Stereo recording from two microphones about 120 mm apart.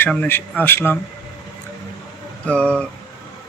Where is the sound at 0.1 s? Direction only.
15° left (ahead or behind).